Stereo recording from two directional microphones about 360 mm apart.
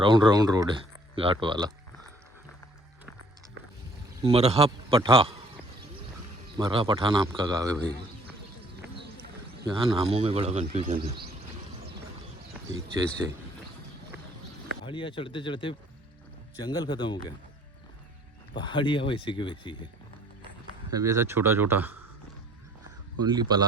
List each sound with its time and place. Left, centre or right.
0.0 s speech: centre
4.2 s speech: centre
6.6 s speech: centre
9.6 s speech: centre
14.8 s speech: centre
18.5 s speech: centre
20.9 s speech: centre
23.2 s speech: centre